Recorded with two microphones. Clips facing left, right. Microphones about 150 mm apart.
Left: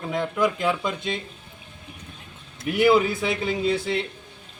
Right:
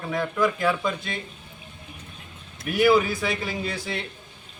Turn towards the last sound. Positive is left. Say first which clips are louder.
# left 7 dB
turn(degrees=25)  # may be behind; listen again after turning